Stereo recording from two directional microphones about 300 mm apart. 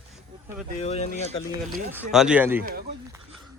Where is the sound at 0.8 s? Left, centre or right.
Left.